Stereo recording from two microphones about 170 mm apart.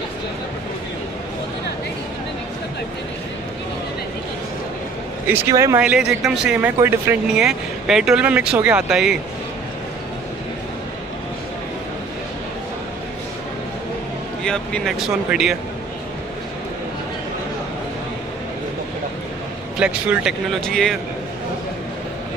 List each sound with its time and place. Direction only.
5.3 s speech: 15° right (ahead or behind)
5.8 s speech: 5° right (ahead or behind)
14.4 s speech: 5° left (ahead or behind)
19.8 s speech: 5° right (ahead or behind)